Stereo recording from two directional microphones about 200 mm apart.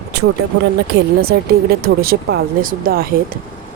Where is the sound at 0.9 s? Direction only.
50° right (ahead or behind).